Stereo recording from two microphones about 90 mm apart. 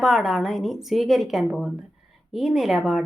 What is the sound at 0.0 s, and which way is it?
A woman's voice, centre (ahead or behind).